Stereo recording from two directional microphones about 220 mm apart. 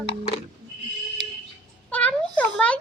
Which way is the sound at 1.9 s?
5° left (ahead or behind).